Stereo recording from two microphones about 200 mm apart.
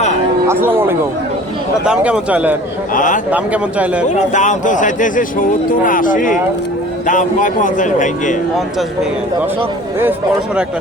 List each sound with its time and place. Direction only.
0.4 s a man's voice: 10° right (ahead or behind)
2.9 s a man's voice: 40° left (ahead or behind)
3.3 s a man's voice: 5° right (ahead or behind)
4.1 s a man's voice: 40° left (ahead or behind)
10.0 s a man's voice: 5° right (ahead or behind)